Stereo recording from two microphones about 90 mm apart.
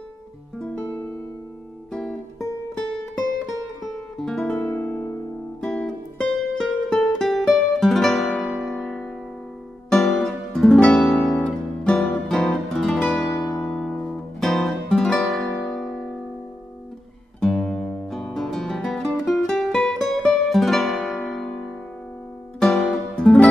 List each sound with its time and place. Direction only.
0.6 s guitar: 10° left (ahead or behind)
1.9 s music: 5° left (ahead or behind); by 5.1 s 20° left (ahead or behind)
5.6 s music: 10° left (ahead or behind)
8.5 s music: 5° right (ahead or behind)
8.7 s music: 5° left (ahead or behind)
10.7 s music: 15° left (ahead or behind)
11.0 s guitar: 5° left (ahead or behind)
11.8 s music: 10° left (ahead or behind)
17.6 s music: 10° left (ahead or behind)
22.6 s music: 10° left (ahead or behind)